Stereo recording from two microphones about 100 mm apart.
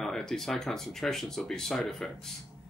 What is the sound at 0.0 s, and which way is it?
Speech, 5° left (ahead or behind).